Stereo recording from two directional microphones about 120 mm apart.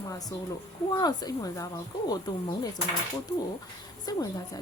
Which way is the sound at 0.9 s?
35° left (ahead or behind).